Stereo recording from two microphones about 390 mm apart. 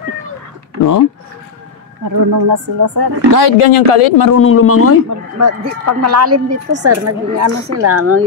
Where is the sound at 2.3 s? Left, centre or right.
Right.